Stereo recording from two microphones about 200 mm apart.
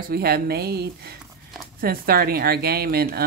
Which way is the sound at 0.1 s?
50° right (ahead or behind).